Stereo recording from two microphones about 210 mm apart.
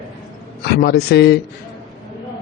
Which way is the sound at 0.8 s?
50° left (ahead or behind).